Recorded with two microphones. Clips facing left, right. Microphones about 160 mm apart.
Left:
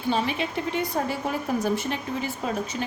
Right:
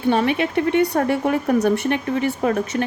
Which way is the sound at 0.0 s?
65° right (ahead or behind).